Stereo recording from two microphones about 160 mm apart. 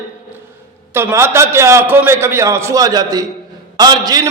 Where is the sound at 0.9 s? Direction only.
15° right (ahead or behind).